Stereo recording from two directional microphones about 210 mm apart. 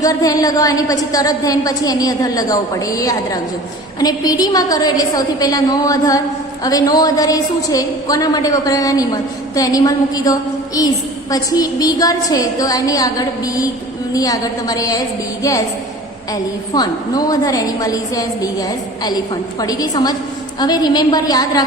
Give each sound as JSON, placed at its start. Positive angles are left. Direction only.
{"t": 0.0, "sound": "a woman's voice", "side_deg": 15}
{"t": 16.7, "sound": "a woman's voice", "side_deg": 20}